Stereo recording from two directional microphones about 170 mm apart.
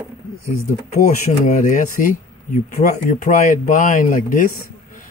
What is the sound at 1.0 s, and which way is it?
Speech, 60° left (ahead or behind).